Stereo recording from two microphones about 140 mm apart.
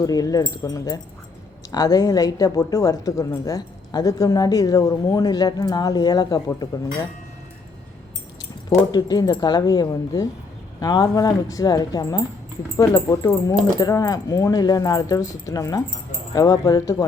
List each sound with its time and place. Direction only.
0.0 s a woman's voice: 25° left (ahead or behind)
8.9 s a woman's voice: 30° left (ahead or behind)